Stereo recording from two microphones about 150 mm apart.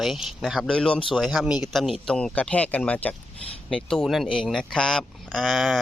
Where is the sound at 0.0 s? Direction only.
Centre (ahead or behind).